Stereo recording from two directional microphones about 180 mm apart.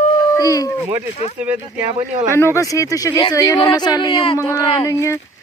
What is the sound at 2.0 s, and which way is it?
Speech, 40° right (ahead or behind).